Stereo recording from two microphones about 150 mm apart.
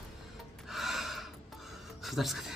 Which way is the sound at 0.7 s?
Centre (ahead or behind).